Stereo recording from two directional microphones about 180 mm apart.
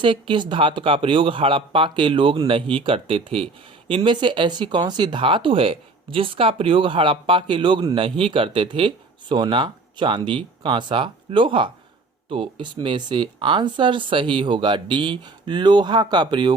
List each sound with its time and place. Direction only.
0.0 s speech: 25° right (ahead or behind)